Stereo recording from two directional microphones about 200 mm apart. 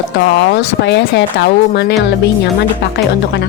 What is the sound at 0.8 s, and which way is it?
Speech, 60° left (ahead or behind).